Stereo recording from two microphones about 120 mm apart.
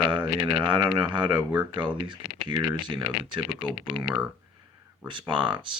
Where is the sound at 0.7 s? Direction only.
40° right (ahead or behind).